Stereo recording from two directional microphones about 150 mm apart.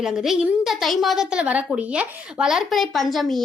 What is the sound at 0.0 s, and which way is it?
A woman's voice, 5° right (ahead or behind).